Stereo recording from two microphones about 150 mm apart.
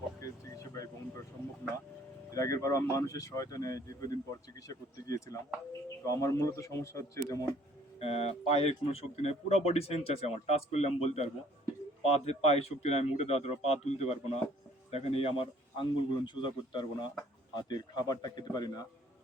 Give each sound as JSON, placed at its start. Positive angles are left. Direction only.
{"t": 0.2, "sound": "a sound", "side_deg": 20}
{"t": 2.3, "sound": "speech", "side_deg": 20}
{"t": 7.9, "sound": "a man's voice", "side_deg": 40}